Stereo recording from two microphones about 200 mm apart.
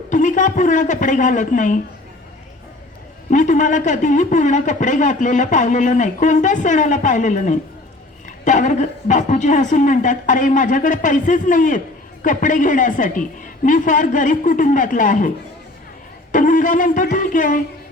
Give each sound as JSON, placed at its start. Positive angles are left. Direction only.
{"t": 0.1, "sound": "a woman's voice", "side_deg": 40}
{"t": 3.2, "sound": "a man's voice", "side_deg": 40}
{"t": 16.3, "sound": "a man's voice", "side_deg": 40}